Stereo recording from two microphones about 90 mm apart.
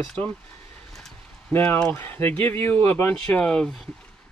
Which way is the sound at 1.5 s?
20° left (ahead or behind).